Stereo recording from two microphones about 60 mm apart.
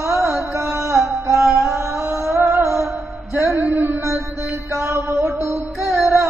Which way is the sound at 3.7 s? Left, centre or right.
Right.